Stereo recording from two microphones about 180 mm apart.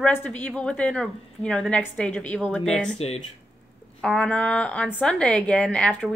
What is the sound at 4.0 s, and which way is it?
A woman's voice, 5° left (ahead or behind).